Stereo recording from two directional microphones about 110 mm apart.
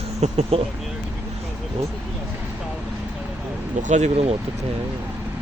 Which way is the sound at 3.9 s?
90° right.